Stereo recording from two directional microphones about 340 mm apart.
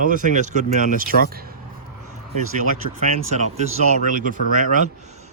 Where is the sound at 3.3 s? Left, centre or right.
Centre.